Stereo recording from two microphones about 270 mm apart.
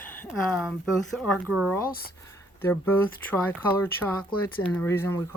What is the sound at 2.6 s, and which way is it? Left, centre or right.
Speech, centre.